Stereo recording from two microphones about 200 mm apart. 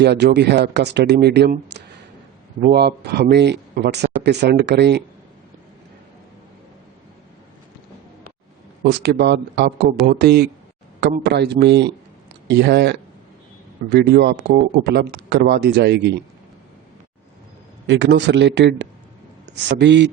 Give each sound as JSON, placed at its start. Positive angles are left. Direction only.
{"t": 0.0, "sound": "speech", "side_deg": -55}
{"t": 8.8, "sound": "speech", "side_deg": -55}
{"t": 17.8, "sound": "speech", "side_deg": -60}